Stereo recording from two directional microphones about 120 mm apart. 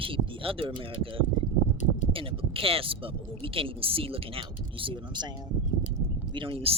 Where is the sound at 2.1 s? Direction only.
50° right (ahead or behind).